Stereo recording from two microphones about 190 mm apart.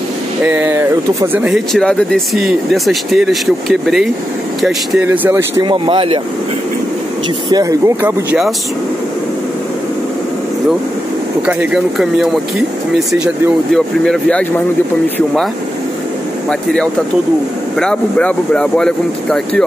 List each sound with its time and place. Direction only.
0.5 s speech: 10° right (ahead or behind)
5.6 s speech: 25° right (ahead or behind)
7.4 s speech: 20° right (ahead or behind)
11.4 s speech: centre (ahead or behind)
13.7 s speech: 5° left (ahead or behind)
16.4 s speech: 5° left (ahead or behind)